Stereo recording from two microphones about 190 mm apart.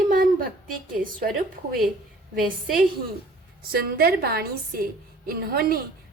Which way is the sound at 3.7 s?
50° right (ahead or behind).